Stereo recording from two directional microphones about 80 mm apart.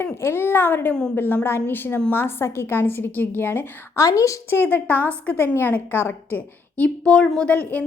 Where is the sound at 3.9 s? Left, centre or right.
Left.